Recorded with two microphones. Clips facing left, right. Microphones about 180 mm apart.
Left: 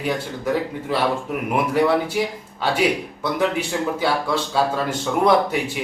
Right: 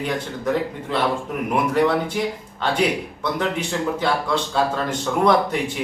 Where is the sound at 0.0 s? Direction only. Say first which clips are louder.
Even; 5° left (ahead or behind).